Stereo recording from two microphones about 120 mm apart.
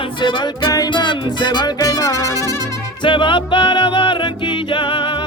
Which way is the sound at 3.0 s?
45° left (ahead or behind).